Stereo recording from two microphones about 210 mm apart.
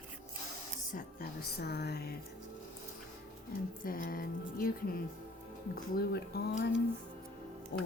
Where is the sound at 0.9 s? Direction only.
40° left (ahead or behind).